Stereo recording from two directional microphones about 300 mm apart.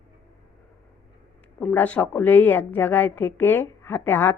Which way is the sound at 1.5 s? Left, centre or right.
Centre.